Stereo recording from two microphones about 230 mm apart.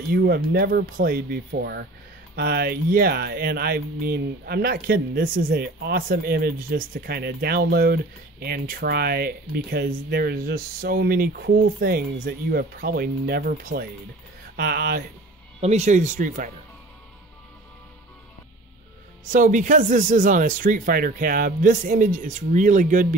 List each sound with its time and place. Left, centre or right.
0.1 s speech: right
19.2 s speech: right